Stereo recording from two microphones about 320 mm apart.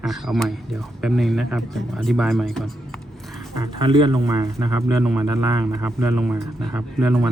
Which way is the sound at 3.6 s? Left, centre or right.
Centre.